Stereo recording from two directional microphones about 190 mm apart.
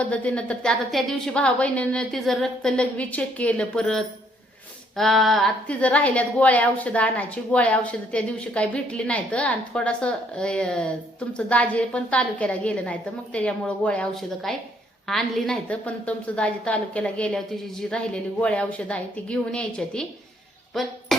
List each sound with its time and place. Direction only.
0.0 s a woman's voice: 5° left (ahead or behind)
21.1 s music: centre (ahead or behind)